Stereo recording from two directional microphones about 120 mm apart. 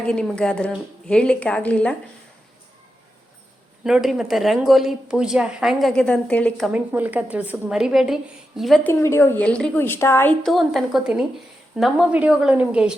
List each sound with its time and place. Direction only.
0.0 s a woman's voice: 5° left (ahead or behind)
3.8 s a woman's voice: 5° right (ahead or behind)
6.7 s a woman's voice: 15° right (ahead or behind)
8.8 s a woman's voice: 20° left (ahead or behind)
10.4 s a woman's voice: centre (ahead or behind)